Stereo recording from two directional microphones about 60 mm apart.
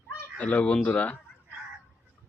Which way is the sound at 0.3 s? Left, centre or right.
Left.